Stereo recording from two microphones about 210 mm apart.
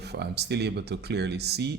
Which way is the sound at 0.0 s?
50° right (ahead or behind).